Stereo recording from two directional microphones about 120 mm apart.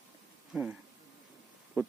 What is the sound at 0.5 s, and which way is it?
Speech, 5° right (ahead or behind).